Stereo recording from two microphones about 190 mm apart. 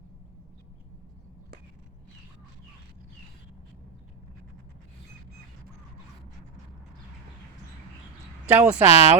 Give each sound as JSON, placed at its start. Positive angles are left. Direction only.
{"t": 8.4, "sound": "speech", "side_deg": -10}
{"t": 8.9, "sound": "speech", "side_deg": 35}